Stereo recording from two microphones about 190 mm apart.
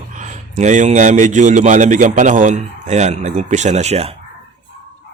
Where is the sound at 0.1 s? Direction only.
40° right (ahead or behind).